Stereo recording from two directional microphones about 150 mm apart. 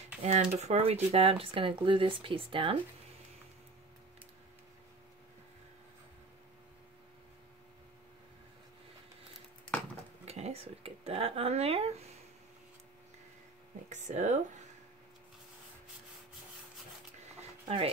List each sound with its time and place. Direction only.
0.2 s speech: 50° right (ahead or behind)
10.2 s speech: 45° right (ahead or behind)
13.8 s speech: 50° right (ahead or behind)